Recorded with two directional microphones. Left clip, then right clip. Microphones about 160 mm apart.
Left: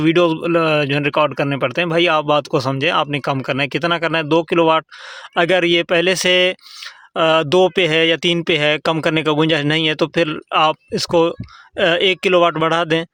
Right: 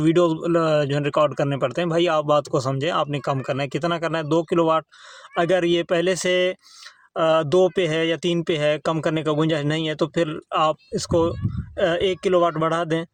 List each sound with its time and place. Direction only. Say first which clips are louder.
0.0 s speech: left 4 dB; 15° left (ahead or behind)